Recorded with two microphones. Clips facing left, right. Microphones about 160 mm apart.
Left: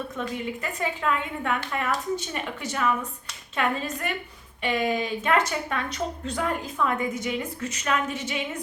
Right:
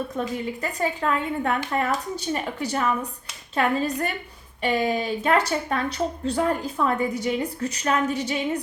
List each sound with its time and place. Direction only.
0.2 s a woman's voice: 35° right (ahead or behind)